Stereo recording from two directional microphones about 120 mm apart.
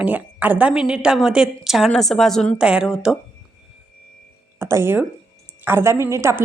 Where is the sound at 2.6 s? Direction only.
10° right (ahead or behind).